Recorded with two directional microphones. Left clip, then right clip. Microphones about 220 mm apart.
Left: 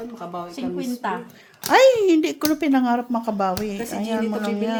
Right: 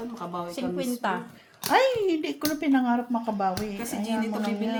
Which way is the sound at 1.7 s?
55° left (ahead or behind).